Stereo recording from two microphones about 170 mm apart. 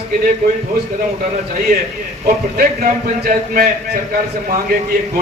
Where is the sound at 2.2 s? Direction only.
55° right (ahead or behind).